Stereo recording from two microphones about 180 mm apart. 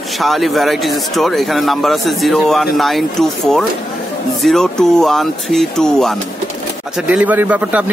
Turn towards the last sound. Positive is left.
turn(degrees=-10)  # may be behind; listen again after turning